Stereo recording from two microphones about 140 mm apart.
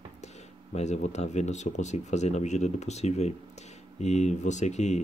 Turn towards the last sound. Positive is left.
turn(degrees=55)  # may be behind; listen again after turning